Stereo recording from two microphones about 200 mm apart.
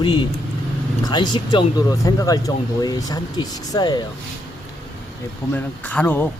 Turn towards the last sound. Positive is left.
turn(degrees=10)  # may be behind; listen again after turning